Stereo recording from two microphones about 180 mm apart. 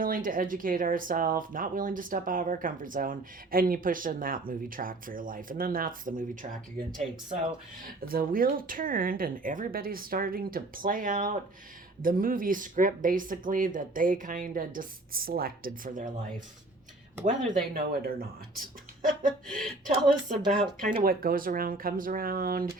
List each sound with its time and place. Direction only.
0.0 s speech: 50° right (ahead or behind)
17.2 s speech: 50° right (ahead or behind)
20.5 s speech: 5° left (ahead or behind)
21.0 s speech: 55° right (ahead or behind)